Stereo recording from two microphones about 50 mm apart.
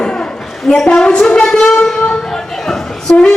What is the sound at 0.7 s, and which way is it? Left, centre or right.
Music, centre.